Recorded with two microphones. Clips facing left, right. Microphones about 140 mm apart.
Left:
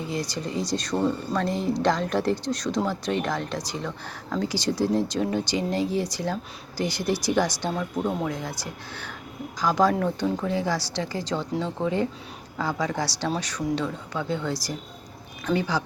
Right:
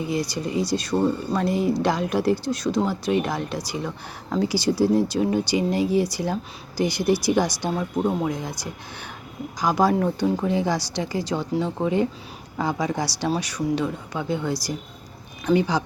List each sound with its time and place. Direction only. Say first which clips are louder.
0.1 s speech: right 3 dB; 10° right (ahead or behind)